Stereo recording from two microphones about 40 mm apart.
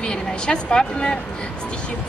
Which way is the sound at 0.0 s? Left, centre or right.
Left.